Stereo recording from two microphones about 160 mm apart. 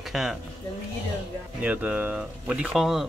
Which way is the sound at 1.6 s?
10° right (ahead or behind).